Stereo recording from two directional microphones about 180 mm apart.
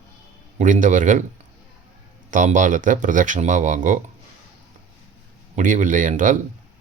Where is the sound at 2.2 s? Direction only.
45° right (ahead or behind).